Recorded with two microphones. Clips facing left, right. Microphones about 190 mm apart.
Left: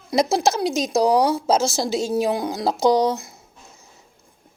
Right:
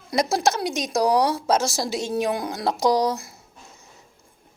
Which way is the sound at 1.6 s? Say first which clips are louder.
Left 3 dB; centre (ahead or behind).